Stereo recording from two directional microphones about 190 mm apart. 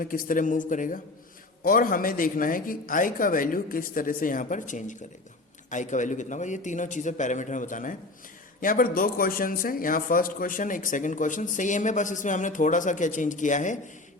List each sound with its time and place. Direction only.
0.0 s a man's voice: 45° left (ahead or behind)